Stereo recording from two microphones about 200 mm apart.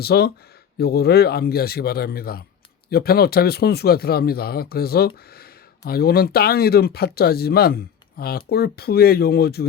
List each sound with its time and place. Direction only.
0.0 s speech: 55° left (ahead or behind)